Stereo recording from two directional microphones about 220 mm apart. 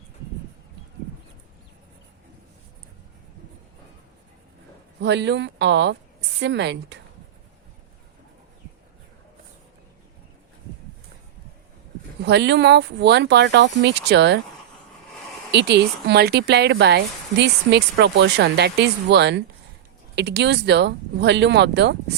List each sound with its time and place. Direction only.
4.9 s speech: 50° right (ahead or behind)
12.2 s speech: 50° right (ahead or behind)
15.5 s speech: 50° right (ahead or behind)